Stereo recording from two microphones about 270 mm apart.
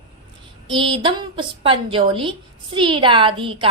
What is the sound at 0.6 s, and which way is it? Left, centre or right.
A woman's voice, centre.